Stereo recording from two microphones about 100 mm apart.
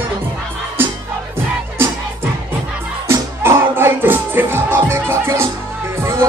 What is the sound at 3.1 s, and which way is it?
Music, 25° right (ahead or behind).